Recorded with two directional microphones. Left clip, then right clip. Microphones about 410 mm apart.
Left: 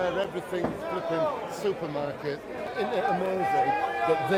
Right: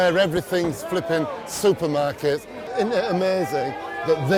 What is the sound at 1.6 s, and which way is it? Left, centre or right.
Speech, right.